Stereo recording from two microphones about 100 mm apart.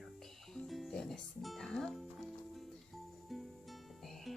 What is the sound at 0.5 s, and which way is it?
Music, 5° left (ahead or behind).